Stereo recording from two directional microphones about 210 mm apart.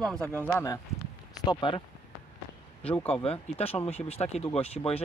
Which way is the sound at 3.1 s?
25° left (ahead or behind).